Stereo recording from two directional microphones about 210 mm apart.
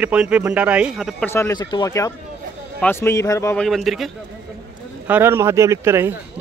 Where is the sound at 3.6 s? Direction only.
Centre (ahead or behind).